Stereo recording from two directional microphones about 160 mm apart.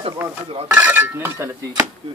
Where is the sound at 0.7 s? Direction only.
10° right (ahead or behind).